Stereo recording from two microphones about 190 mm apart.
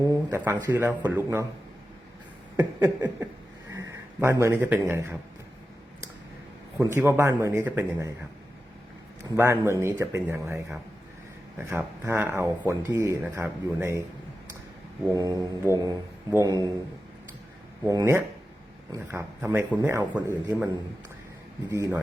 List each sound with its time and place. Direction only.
0.0 s speech: 15° right (ahead or behind)
2.6 s a man's voice: 10° right (ahead or behind)
6.7 s speech: 10° right (ahead or behind)
9.2 s speech: 15° right (ahead or behind)
15.1 s speech: 20° right (ahead or behind)
17.8 s speech: 15° right (ahead or behind)
21.7 s speech: 10° right (ahead or behind)